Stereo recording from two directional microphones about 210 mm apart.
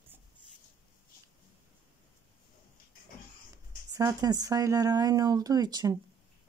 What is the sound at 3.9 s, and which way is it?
Speech, 20° right (ahead or behind).